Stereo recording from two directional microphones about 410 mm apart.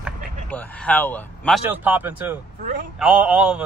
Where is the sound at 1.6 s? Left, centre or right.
Centre.